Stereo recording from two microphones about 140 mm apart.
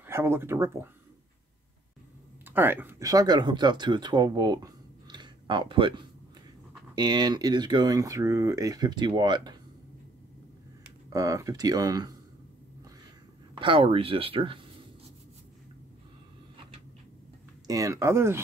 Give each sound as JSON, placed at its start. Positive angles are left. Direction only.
{"t": 0.0, "sound": "speech", "side_deg": -15}
{"t": 2.4, "sound": "speech", "side_deg": -15}
{"t": 7.0, "sound": "speech", "side_deg": -30}
{"t": 11.1, "sound": "speech", "side_deg": -25}
{"t": 13.6, "sound": "speech", "side_deg": -40}
{"t": 17.6, "sound": "speech", "side_deg": -25}